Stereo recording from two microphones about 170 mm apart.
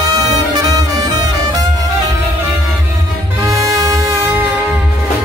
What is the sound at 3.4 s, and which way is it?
Music, 20° right (ahead or behind).